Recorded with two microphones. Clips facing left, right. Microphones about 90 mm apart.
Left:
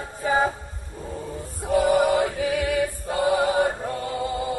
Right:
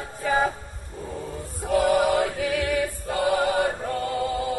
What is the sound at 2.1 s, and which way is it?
Chant, 15° left (ahead or behind).